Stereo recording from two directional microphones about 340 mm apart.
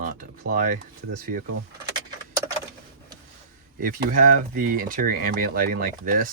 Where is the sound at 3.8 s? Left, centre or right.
Right.